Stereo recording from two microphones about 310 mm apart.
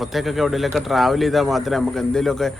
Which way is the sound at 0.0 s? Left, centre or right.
Centre.